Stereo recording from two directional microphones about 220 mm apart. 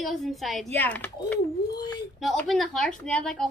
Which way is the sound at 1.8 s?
20° left (ahead or behind).